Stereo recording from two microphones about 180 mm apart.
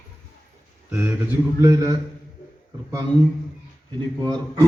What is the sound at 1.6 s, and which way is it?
Speech, 20° right (ahead or behind).